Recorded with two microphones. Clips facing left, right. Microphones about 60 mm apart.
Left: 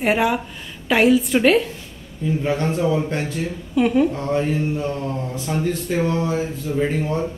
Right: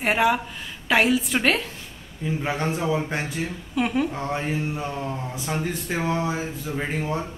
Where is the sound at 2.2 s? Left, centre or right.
Centre.